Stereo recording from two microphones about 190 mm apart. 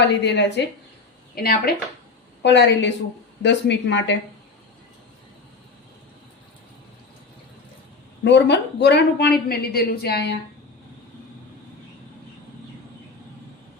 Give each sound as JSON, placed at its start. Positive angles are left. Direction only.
{"t": 0.0, "sound": "speech", "side_deg": 65}
{"t": 1.4, "sound": "speech", "side_deg": 55}
{"t": 2.4, "sound": "a woman's voice", "side_deg": 65}
{"t": 8.2, "sound": "speech", "side_deg": 65}